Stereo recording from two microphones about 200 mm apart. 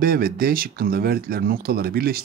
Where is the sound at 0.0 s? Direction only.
50° right (ahead or behind).